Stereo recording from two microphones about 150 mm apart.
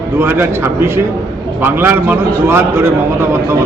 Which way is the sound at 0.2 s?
15° right (ahead or behind).